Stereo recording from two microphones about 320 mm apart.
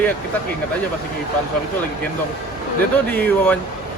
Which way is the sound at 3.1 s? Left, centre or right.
Centre.